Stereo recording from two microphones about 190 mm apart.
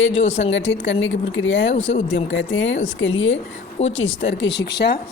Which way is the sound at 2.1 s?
85° left.